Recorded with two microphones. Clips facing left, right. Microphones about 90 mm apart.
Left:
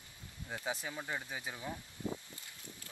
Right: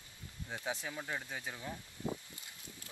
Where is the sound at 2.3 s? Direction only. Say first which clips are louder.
Left 1 dB; 20° right (ahead or behind).